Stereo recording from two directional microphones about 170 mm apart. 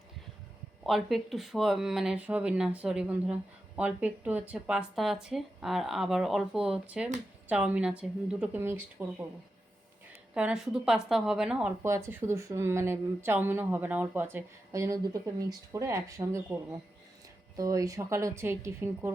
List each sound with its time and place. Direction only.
0.9 s a woman's voice: centre (ahead or behind)
10.3 s a woman's voice: 5° right (ahead or behind)
17.6 s speech: 20° right (ahead or behind)